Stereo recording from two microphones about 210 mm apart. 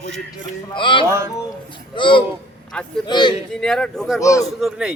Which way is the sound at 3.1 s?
20° left (ahead or behind).